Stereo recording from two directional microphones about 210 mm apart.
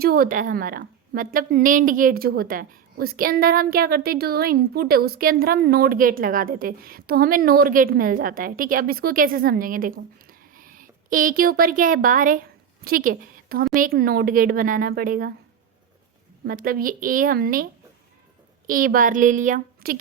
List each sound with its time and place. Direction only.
0.0 s a woman's voice: 45° right (ahead or behind)
16.5 s a woman's voice: 45° right (ahead or behind)
18.7 s a woman's voice: 40° right (ahead or behind)